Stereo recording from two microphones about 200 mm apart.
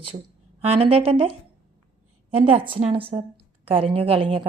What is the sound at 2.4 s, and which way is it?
A woman's voice, 25° right (ahead or behind).